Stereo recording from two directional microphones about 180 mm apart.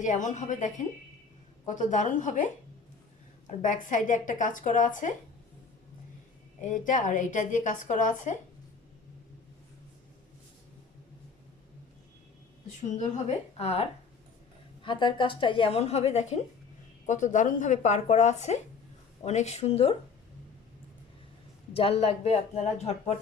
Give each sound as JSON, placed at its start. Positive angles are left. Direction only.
{"t": 0.0, "sound": "a woman's voice", "side_deg": 45}
{"t": 6.6, "sound": "a woman's voice", "side_deg": 45}
{"t": 13.0, "sound": "speech", "side_deg": 40}
{"t": 14.8, "sound": "a woman's voice", "side_deg": 25}
{"t": 21.7, "sound": "speech", "side_deg": 35}